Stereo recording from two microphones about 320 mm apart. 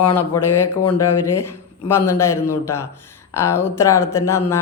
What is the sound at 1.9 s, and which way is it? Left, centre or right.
Speech, centre.